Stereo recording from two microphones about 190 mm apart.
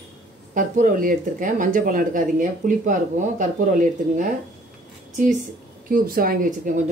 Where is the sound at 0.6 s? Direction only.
45° right (ahead or behind).